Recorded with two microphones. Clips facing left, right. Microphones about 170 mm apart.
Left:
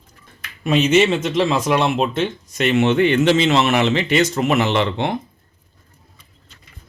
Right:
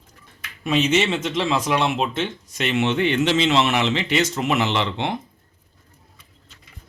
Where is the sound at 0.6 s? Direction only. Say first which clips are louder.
Left 5 dB; 50° left (ahead or behind).